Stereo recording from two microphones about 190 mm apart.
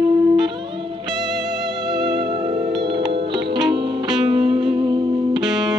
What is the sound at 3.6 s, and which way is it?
Music, 25° right (ahead or behind).